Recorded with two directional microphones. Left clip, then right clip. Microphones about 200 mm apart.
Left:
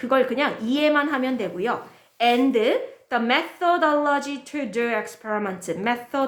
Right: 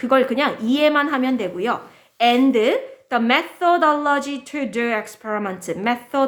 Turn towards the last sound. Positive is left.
turn(degrees=-20)  # may be behind; listen again after turning